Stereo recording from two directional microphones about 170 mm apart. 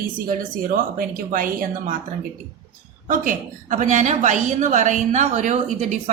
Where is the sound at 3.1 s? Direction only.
50° right (ahead or behind).